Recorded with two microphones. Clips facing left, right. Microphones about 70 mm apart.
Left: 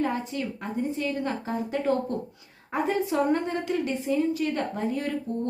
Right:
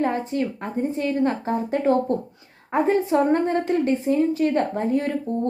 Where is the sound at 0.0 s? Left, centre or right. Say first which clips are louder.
Right 5 dB; right.